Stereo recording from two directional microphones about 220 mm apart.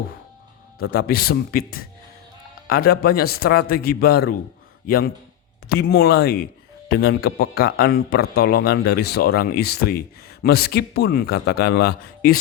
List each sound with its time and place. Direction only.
0.8 s speech: 45° left (ahead or behind)
2.6 s speech: 45° left (ahead or behind)